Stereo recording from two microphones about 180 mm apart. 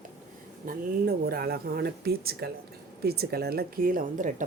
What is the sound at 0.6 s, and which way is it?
Speech, 55° right (ahead or behind).